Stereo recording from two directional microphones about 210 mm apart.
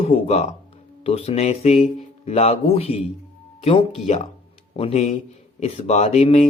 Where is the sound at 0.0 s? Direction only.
30° left (ahead or behind).